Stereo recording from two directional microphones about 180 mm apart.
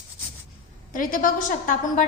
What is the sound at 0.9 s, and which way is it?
A woman's voice, 50° left (ahead or behind).